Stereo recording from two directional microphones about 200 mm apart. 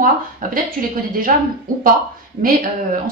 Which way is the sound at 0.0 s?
45° right (ahead or behind).